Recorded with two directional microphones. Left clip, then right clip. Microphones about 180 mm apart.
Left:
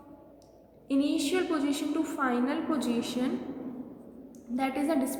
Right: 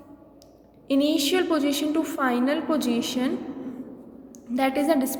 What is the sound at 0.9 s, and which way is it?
A woman's voice, 45° right (ahead or behind).